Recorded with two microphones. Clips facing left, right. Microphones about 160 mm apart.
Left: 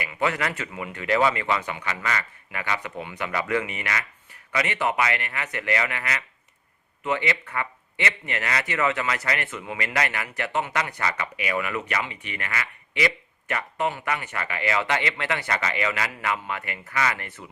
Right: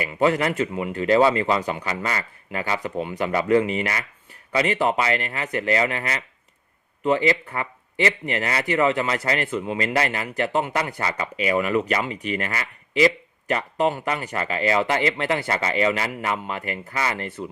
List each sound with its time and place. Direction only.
0.0 s a man's voice: 30° right (ahead or behind)